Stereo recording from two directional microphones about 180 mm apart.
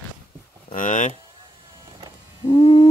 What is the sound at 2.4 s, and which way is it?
Owl, 30° left (ahead or behind).